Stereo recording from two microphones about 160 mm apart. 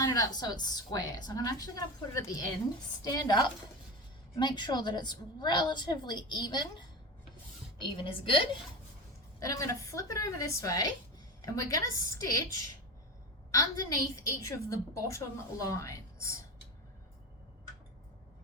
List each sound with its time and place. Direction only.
0.0 s a woman's voice: 20° left (ahead or behind)
9.4 s a woman's voice: 20° left (ahead or behind)